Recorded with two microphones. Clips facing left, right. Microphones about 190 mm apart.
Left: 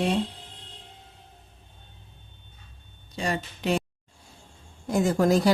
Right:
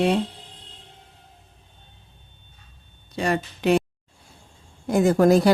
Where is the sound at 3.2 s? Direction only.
65° right (ahead or behind).